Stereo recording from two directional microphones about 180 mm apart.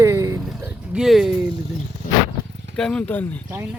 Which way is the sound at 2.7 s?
5° left (ahead or behind).